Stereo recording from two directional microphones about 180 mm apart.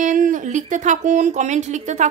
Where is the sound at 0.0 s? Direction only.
45° right (ahead or behind).